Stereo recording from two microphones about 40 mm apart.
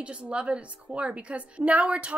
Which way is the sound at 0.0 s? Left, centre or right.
Right.